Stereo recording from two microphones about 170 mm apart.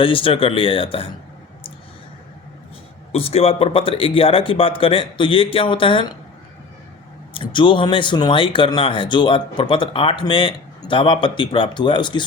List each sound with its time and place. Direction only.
0.0 s a man's voice: 30° left (ahead or behind)
3.1 s a man's voice: 35° left (ahead or behind)
7.3 s speech: 30° left (ahead or behind)